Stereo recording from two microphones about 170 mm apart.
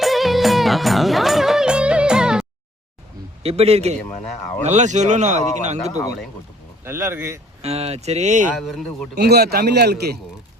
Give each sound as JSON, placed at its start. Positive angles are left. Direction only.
{"t": 0.0, "sound": "music", "side_deg": 0}
{"t": 3.4, "sound": "speech", "side_deg": -35}
{"t": 6.8, "sound": "speech", "side_deg": -15}
{"t": 7.6, "sound": "speech", "side_deg": -40}
{"t": 8.5, "sound": "speech", "side_deg": 0}
{"t": 9.1, "sound": "a man's voice", "side_deg": -70}